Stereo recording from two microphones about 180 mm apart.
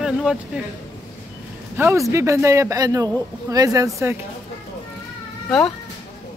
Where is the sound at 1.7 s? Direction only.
15° right (ahead or behind).